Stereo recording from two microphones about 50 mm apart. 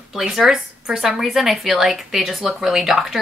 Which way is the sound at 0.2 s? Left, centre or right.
Centre.